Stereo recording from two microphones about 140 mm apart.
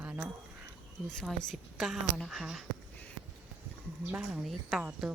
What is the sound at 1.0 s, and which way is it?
Speech, 5° left (ahead or behind).